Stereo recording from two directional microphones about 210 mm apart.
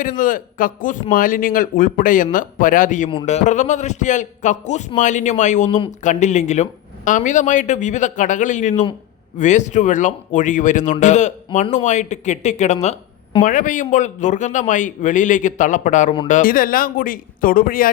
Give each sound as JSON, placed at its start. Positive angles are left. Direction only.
{"t": 0.0, "sound": "a man's voice", "side_deg": 40}
{"t": 3.1, "sound": "a man's voice", "side_deg": 30}